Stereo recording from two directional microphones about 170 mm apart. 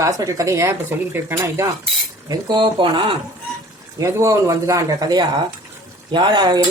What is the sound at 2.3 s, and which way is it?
Speech, 25° right (ahead or behind).